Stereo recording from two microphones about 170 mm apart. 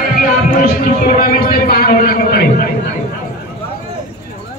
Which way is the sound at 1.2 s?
60° left (ahead or behind).